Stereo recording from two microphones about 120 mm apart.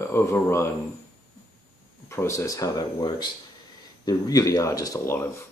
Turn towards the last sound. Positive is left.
turn(degrees=25)  # may be behind; listen again after turning